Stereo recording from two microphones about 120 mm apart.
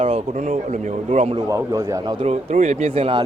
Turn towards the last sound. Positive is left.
turn(degrees=-50)  # may be behind; listen again after turning